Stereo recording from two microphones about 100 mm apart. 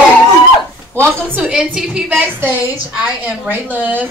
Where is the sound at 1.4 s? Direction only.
5° right (ahead or behind).